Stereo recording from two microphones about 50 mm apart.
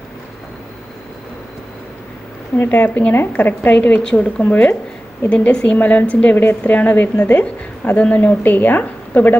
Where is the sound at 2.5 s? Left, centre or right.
Left.